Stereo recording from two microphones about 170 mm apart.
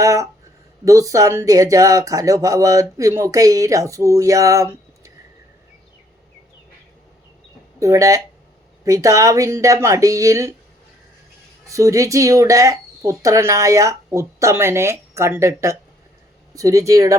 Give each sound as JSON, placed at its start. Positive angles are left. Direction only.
{"t": 0.0, "sound": "speech", "side_deg": -20}
{"t": 7.8, "sound": "speech", "side_deg": -20}
{"t": 11.7, "sound": "speech", "side_deg": -20}